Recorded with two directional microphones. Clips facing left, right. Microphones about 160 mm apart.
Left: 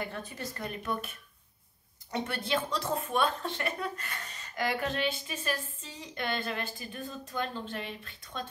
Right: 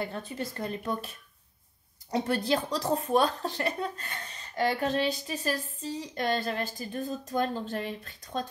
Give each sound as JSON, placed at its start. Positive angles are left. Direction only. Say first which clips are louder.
{"t": 0.0, "sound": "speech", "louder": "right 4 dB", "side_deg": -30}